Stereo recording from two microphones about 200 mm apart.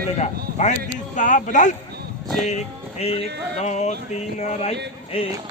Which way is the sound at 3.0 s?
30° left (ahead or behind).